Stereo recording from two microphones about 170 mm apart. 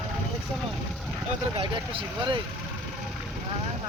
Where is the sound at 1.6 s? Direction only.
30° right (ahead or behind).